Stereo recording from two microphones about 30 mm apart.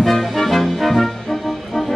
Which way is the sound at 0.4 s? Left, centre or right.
Centre.